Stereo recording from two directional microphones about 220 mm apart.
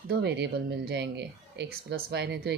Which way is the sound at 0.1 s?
50° right (ahead or behind).